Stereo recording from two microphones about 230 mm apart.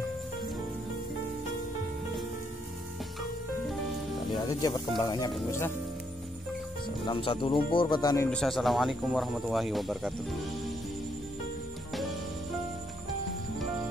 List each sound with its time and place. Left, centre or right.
4.3 s speech: centre
7.1 s speech: left
8.3 s speech: centre